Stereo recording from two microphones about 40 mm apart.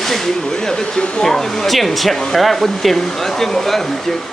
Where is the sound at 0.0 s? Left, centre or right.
Centre.